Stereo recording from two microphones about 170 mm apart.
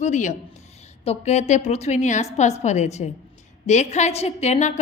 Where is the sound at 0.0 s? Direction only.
45° left (ahead or behind).